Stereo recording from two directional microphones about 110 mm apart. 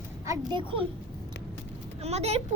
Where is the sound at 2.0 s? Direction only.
70° right (ahead or behind).